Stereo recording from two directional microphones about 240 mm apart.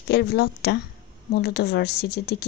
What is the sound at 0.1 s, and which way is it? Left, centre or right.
A woman's voice, left.